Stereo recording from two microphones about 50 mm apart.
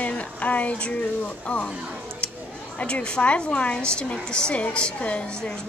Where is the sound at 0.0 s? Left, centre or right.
Left.